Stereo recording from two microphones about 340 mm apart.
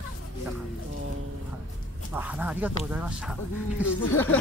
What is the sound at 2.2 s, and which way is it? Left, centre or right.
Speech, centre.